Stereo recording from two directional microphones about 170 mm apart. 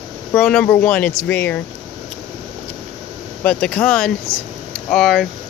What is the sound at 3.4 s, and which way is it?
Speech, 5° left (ahead or behind).